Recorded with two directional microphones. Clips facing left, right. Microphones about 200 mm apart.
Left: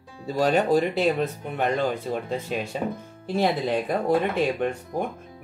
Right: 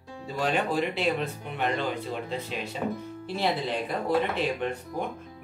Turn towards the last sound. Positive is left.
turn(degrees=45)  # may be behind; listen again after turning